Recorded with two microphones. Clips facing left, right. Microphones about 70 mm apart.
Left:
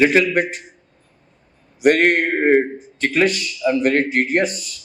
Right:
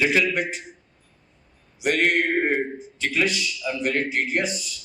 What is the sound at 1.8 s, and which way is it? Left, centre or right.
A man's voice, left.